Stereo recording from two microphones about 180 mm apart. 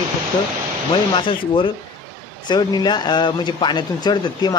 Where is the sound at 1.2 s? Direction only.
30° left (ahead or behind).